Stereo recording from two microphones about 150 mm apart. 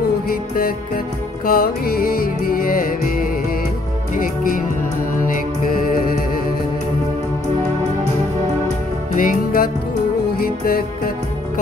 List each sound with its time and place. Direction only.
0.3 s music: 75° left (ahead or behind)
9.1 s music: 65° left (ahead or behind)